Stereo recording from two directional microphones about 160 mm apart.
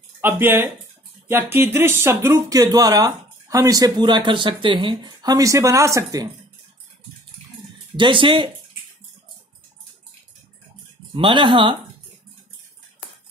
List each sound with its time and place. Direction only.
0.2 s speech: 15° right (ahead or behind)
7.9 s speech: 30° right (ahead or behind)
11.1 s speech: 30° right (ahead or behind)